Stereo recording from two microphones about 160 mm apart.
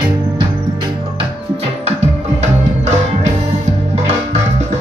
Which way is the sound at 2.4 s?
45° right (ahead or behind).